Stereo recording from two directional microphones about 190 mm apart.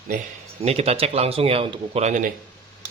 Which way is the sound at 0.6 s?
35° right (ahead or behind).